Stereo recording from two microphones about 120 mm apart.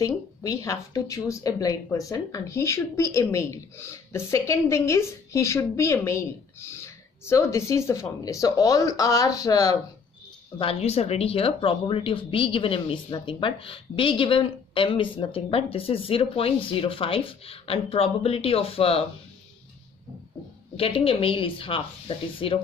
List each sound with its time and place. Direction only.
0.0 s speech: 25° left (ahead or behind)
10.6 s speech: 55° left (ahead or behind)
20.7 s speech: 50° left (ahead or behind)